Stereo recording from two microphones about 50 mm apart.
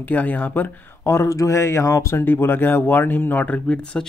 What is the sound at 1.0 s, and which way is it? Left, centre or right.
Speech, left.